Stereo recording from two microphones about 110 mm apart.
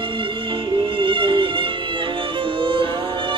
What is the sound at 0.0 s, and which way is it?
Music, 50° right (ahead or behind).